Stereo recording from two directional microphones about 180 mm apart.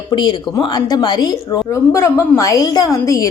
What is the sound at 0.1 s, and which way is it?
A woman's voice, 25° left (ahead or behind).